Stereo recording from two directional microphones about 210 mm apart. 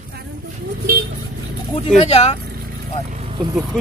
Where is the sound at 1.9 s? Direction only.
30° left (ahead or behind).